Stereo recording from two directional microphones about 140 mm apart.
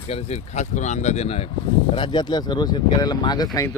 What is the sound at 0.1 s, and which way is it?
Speech, 55° left (ahead or behind).